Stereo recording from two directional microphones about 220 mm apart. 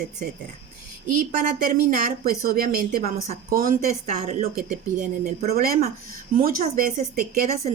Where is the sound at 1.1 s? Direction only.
35° right (ahead or behind).